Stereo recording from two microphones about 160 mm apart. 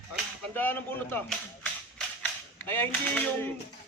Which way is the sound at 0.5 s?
15° left (ahead or behind).